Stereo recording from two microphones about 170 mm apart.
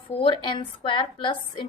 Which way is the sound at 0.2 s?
30° left (ahead or behind).